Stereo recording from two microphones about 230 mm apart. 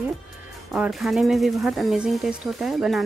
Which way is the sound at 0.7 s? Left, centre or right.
Centre.